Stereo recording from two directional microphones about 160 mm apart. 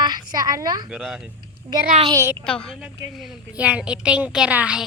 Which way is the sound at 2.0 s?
20° right (ahead or behind).